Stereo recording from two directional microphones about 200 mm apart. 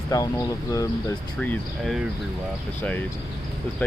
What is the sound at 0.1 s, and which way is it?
Speech, 15° left (ahead or behind).